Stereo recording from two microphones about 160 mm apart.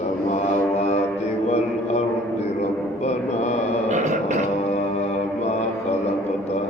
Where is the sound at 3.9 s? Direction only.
50° right (ahead or behind).